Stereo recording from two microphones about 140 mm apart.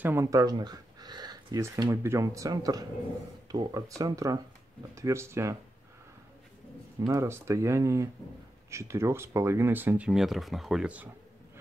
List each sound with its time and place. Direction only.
0.0 s speech: 20° right (ahead or behind)
7.1 s speech: 20° right (ahead or behind)